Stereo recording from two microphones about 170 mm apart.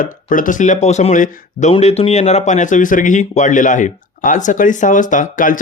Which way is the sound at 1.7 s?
35° left (ahead or behind).